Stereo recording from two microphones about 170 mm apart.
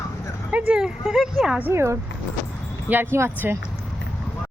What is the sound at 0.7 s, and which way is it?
Speech, centre (ahead or behind).